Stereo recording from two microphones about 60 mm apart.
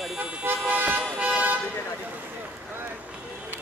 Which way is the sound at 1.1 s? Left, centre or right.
Right.